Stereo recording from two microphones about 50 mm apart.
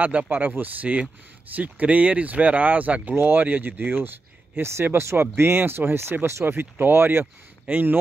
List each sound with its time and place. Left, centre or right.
0.0 s speech: right
4.6 s speech: right
6.4 s speech: right
7.6 s speech: right